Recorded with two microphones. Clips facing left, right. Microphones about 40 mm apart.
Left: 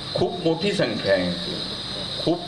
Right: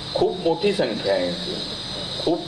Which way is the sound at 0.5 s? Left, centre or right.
Left.